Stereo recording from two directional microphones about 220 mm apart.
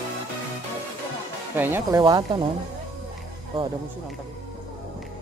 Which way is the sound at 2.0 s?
20° right (ahead or behind).